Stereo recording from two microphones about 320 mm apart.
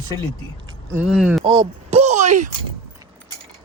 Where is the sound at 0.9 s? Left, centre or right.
Centre.